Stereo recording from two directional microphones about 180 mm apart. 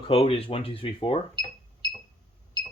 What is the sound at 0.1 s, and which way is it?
Speech, 30° left (ahead or behind).